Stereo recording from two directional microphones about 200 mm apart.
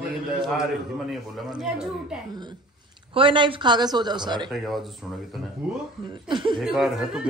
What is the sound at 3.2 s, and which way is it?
Speech, 25° right (ahead or behind).